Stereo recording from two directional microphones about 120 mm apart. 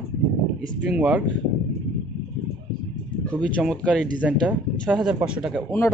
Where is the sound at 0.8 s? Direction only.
10° right (ahead or behind).